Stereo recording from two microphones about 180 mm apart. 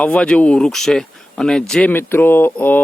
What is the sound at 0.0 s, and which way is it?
Speech, 5° left (ahead or behind).